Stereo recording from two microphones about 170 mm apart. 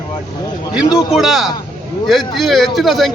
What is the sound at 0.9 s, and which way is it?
A man's voice, centre (ahead or behind).